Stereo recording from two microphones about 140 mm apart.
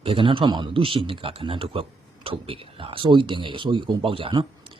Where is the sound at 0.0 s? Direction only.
40° right (ahead or behind).